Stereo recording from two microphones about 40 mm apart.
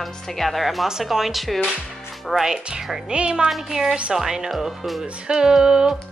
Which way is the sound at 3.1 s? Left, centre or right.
Right.